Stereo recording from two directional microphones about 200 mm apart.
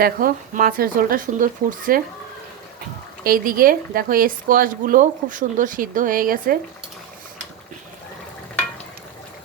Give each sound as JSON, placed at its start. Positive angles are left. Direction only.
{"t": 0.0, "sound": "a woman's voice", "side_deg": -45}
{"t": 3.2, "sound": "a woman's voice", "side_deg": -45}